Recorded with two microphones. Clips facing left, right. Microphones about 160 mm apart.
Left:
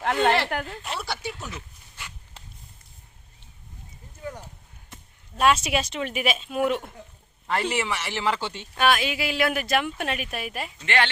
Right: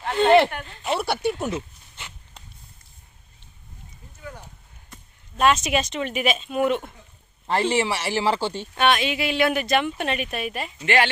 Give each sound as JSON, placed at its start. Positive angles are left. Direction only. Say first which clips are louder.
{"t": 0.0, "sound": "a sound", "louder": "right 1 dB", "side_deg": 70}
{"t": 0.5, "sound": "speech", "louder": "left 6 dB", "side_deg": 75}
{"t": 0.9, "sound": "speech", "louder": "right 11 dB", "side_deg": -60}
{"t": 1.5, "sound": "a sound", "louder": "right 11 dB", "side_deg": -25}
{"t": 5.4, "sound": "speech", "louder": "right 2 dB", "side_deg": 5}
{"t": 7.4, "sound": "speech", "louder": "right 4 dB", "side_deg": -30}
{"t": 8.7, "sound": "speech", "louder": "right 1 dB", "side_deg": 0}
{"t": 10.8, "sound": "speech", "louder": "right 4 dB", "side_deg": -10}